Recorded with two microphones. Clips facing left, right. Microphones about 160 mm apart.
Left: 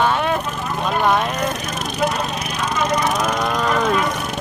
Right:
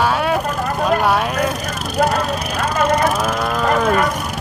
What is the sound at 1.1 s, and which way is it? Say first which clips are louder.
Speech: right 1 dB; 5° right (ahead or behind).